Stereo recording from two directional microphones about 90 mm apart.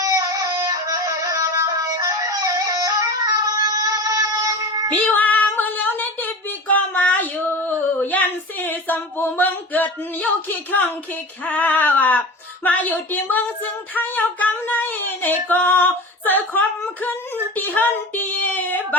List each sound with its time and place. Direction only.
0.0 s music: 35° right (ahead or behind)
5.0 s female singing: 20° left (ahead or behind)
6.0 s a sound: 20° left (ahead or behind)